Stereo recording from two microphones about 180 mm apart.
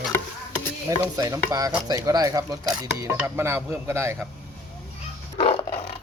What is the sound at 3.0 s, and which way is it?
Speech, 15° right (ahead or behind).